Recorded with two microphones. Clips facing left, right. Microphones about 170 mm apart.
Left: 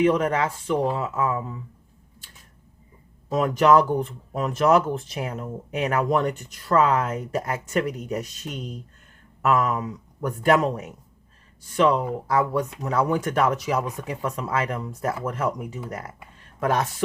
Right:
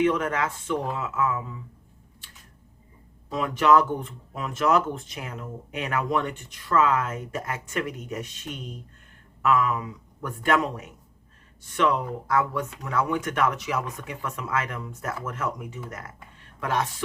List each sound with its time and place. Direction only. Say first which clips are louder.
0.0 s speech: left 3 dB; 35° left (ahead or behind)
3.2 s speech: left 3 dB; 45° left (ahead or behind)